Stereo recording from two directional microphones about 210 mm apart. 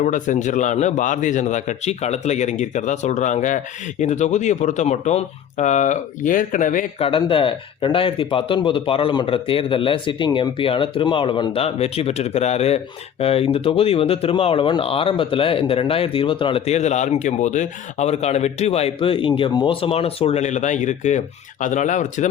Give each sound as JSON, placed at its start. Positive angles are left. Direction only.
{"t": 0.0, "sound": "a man's voice", "side_deg": 35}
{"t": 7.1, "sound": "a man's voice", "side_deg": 25}